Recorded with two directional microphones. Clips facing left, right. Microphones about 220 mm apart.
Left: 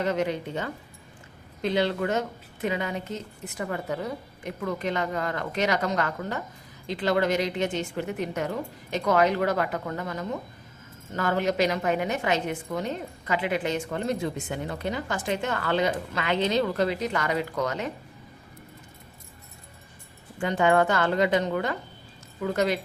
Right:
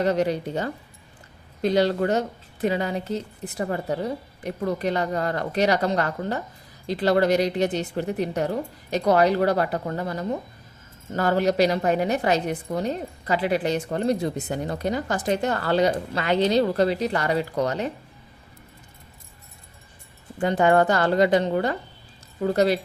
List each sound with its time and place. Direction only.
0.0 s a woman's voice: 35° right (ahead or behind)
20.4 s a woman's voice: 40° right (ahead or behind)